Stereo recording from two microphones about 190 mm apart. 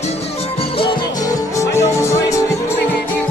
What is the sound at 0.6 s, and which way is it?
Music, 25° left (ahead or behind).